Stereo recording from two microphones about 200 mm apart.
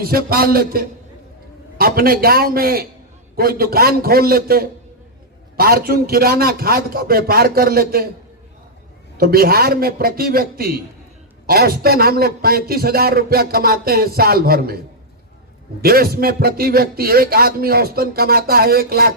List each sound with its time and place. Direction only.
0.1 s a man's voice: 50° right (ahead or behind)
9.1 s a man's voice: 50° right (ahead or behind)
15.8 s a man's voice: 50° right (ahead or behind)